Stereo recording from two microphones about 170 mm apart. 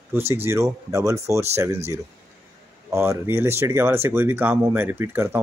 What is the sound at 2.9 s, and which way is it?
Speech, 15° right (ahead or behind).